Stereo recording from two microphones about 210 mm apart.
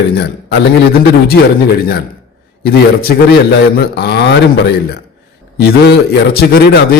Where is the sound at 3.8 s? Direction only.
50° left (ahead or behind).